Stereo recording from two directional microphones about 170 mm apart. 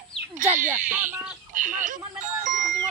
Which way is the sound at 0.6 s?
50° right (ahead or behind).